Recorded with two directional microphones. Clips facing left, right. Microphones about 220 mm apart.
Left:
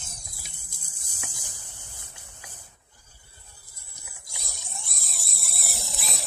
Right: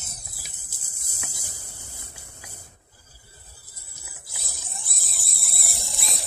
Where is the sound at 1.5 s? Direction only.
35° right (ahead or behind).